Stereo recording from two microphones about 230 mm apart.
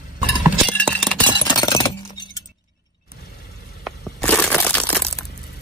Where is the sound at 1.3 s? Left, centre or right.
Centre.